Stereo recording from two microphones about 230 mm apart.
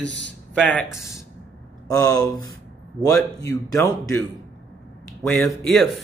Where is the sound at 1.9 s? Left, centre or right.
Centre.